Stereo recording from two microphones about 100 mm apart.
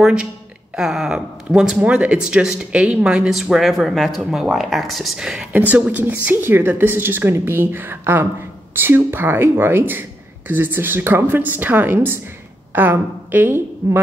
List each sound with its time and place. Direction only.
0.0 s a woman's voice: 10° right (ahead or behind)